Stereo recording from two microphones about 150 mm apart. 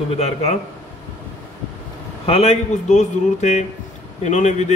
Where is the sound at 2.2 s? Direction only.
45° left (ahead or behind).